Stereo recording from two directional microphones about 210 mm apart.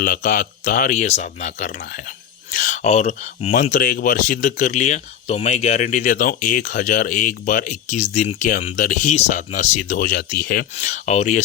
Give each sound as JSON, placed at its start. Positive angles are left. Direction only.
{"t": 0.0, "sound": "speech", "side_deg": 40}
{"t": 10.8, "sound": "speech", "side_deg": 35}